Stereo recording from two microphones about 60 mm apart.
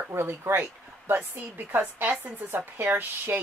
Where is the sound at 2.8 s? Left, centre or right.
Right.